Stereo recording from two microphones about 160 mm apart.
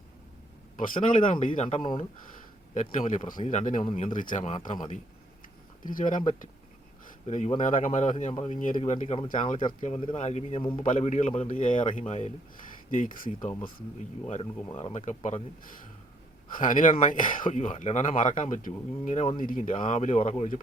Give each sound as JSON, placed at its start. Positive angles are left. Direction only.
{"t": 0.8, "sound": "speech", "side_deg": 55}
{"t": 1.8, "sound": "speech", "side_deg": 30}
{"t": 2.7, "sound": "speech", "side_deg": 55}
{"t": 5.8, "sound": "speech", "side_deg": 55}
{"t": 8.5, "sound": "speech", "side_deg": 55}
{"t": 8.8, "sound": "speech", "side_deg": 45}
{"t": 9.3, "sound": "speech", "side_deg": 50}
{"t": 9.8, "sound": "speech", "side_deg": 40}
{"t": 10.6, "sound": "speech", "side_deg": 30}
{"t": 10.8, "sound": "speech", "side_deg": 50}
{"t": 12.9, "sound": "speech", "side_deg": 55}
{"t": 14.7, "sound": "speech", "side_deg": 35}
{"t": 16.6, "sound": "speech", "side_deg": 55}